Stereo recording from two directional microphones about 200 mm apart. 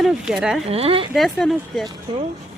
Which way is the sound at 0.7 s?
30° right (ahead or behind).